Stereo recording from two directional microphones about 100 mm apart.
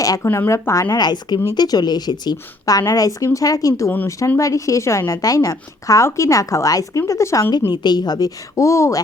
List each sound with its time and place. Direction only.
0.0 s a woman's voice: 35° left (ahead or behind)
7.7 s a woman's voice: 45° left (ahead or behind); by 9.0 s 30° left (ahead or behind)